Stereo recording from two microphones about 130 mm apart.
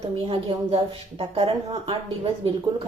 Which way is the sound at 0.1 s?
45° right (ahead or behind).